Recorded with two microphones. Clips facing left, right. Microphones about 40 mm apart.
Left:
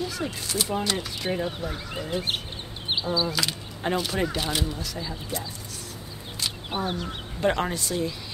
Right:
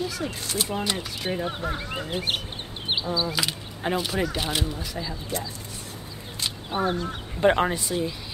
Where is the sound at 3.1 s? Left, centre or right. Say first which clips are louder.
Even; centre.